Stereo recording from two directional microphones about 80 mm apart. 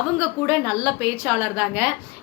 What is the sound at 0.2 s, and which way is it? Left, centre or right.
A woman's voice, centre.